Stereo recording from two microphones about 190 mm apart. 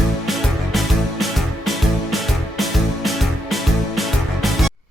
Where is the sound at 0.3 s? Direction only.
Centre (ahead or behind).